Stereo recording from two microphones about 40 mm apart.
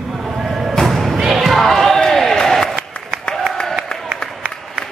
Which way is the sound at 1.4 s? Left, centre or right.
Centre.